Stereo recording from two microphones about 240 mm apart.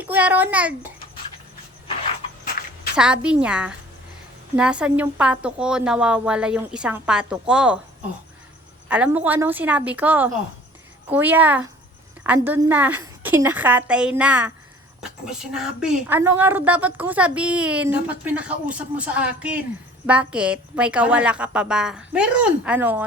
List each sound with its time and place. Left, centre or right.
0.0 s a woman's voice: centre
2.4 s a sound: left
2.9 s a woman's voice: centre
8.9 s a woman's voice: centre